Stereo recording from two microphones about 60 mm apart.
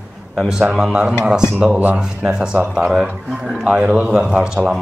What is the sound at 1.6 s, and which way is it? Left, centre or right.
Speech, right.